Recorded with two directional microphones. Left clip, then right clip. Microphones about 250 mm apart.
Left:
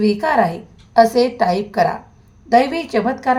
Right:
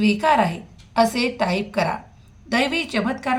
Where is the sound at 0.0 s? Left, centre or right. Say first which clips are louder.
Left 2 dB; right.